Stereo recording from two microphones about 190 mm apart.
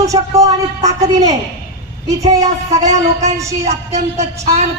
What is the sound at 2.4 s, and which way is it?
A woman's voice, 35° right (ahead or behind).